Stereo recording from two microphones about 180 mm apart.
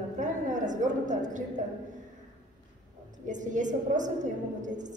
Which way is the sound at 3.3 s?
45° right (ahead or behind).